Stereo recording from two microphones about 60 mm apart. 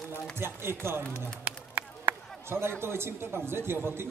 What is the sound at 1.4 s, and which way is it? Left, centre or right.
Run, right.